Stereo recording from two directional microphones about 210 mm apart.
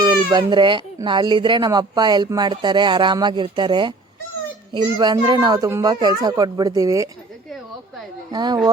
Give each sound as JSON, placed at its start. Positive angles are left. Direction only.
{"t": 0.0, "sound": "speech", "side_deg": -20}
{"t": 8.3, "sound": "speech", "side_deg": -20}